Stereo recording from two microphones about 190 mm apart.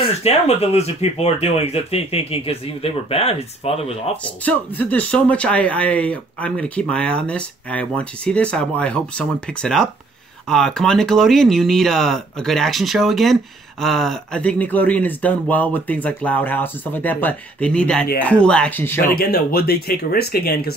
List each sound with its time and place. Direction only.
0.2 s speech: 35° left (ahead or behind)
4.2 s speech: 10° left (ahead or behind)
19.1 s speech: 55° left (ahead or behind)